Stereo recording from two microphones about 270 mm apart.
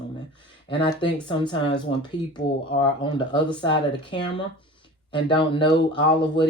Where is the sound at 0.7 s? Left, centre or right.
Centre.